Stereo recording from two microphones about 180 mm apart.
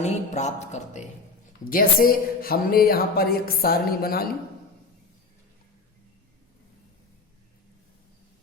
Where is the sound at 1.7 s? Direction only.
55° left (ahead or behind).